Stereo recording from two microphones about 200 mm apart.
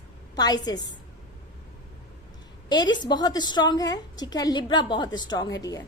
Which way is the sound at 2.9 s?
20° left (ahead or behind).